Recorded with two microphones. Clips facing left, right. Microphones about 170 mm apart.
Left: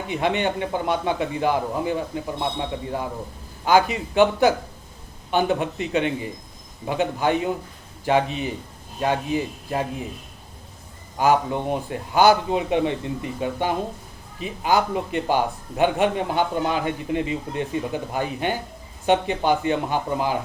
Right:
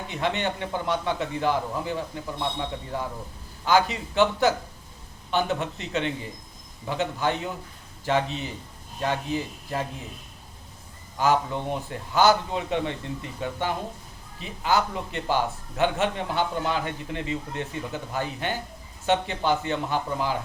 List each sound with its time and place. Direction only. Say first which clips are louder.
0.1 s a man's voice: left 5 dB; 15° left (ahead or behind)
11.2 s a man's voice: left 4 dB; 15° left (ahead or behind)